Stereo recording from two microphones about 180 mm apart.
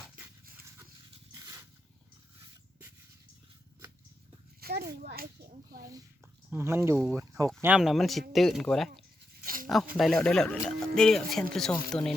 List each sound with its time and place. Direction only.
1.3 s dog: 15° right (ahead or behind)
4.6 s a sound: 55° right (ahead or behind)
5.0 s speech: 60° right (ahead or behind)
6.5 s speech: 15° right (ahead or behind)
7.6 s speech: 5° right (ahead or behind)
9.4 s a sound: 50° right (ahead or behind)
9.9 s speech: centre (ahead or behind)